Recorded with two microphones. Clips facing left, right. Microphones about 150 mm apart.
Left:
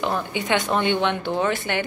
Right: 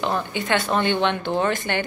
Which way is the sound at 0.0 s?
10° left (ahead or behind).